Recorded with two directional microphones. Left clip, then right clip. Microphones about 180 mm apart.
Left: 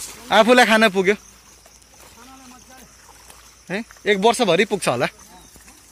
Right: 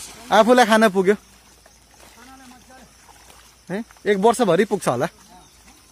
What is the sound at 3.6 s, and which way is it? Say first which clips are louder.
Speech: left 1 dB; 25° right (ahead or behind).